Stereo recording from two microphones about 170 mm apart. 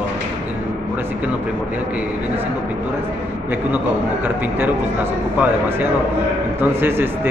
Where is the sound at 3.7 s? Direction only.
10° right (ahead or behind).